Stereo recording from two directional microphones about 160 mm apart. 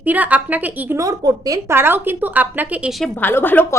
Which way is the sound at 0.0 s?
10° right (ahead or behind).